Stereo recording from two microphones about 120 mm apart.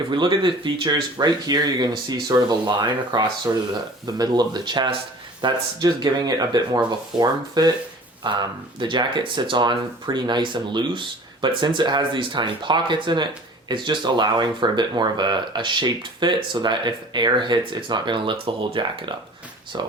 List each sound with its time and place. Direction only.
0.1 s speech: 40° right (ahead or behind)